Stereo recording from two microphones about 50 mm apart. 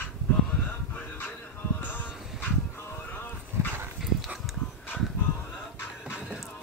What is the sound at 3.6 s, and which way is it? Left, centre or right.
Dog, right.